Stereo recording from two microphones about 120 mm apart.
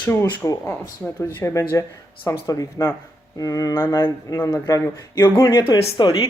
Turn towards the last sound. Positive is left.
turn(degrees=40)  # may be behind; listen again after turning